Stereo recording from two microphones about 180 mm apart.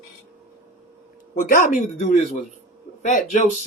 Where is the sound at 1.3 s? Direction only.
45° left (ahead or behind).